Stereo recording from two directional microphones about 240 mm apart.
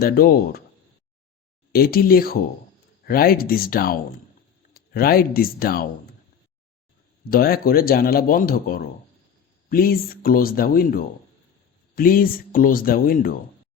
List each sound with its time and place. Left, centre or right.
0.0 s speech: left
1.7 s speech: left
7.3 s speech: left